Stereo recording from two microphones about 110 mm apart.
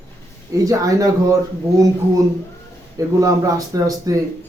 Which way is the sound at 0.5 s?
30° right (ahead or behind).